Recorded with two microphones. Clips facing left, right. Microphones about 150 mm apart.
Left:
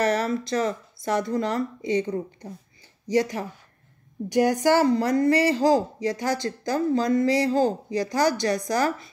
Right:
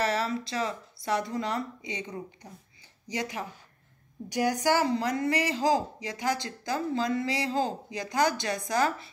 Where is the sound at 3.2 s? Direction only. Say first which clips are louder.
Left 10 dB; 45° left (ahead or behind).